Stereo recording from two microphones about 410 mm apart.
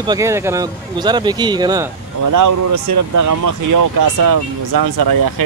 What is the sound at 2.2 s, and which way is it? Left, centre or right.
Speech, right.